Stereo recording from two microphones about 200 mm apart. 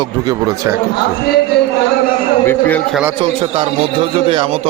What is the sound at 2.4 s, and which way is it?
Speech, 10° left (ahead or behind).